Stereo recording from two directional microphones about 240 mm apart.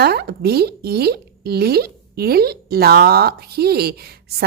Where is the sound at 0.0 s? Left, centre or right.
Right.